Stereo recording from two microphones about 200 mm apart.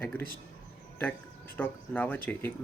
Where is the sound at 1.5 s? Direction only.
10° left (ahead or behind).